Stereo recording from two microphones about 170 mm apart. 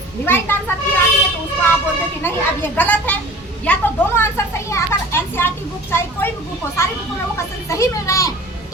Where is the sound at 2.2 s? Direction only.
10° left (ahead or behind).